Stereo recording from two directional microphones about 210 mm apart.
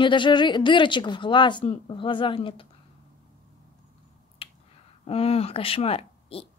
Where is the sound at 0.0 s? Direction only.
20° left (ahead or behind).